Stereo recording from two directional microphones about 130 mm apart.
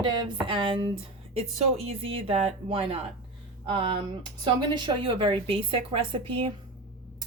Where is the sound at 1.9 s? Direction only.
45° right (ahead or behind).